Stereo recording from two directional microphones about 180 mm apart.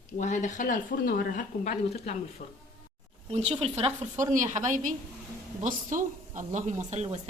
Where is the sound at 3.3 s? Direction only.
35° right (ahead or behind).